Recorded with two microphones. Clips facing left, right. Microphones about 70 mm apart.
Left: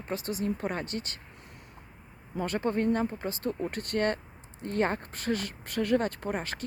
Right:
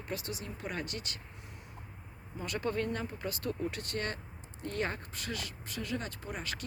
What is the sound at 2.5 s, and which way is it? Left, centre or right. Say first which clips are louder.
Speech: left 6 dB; left.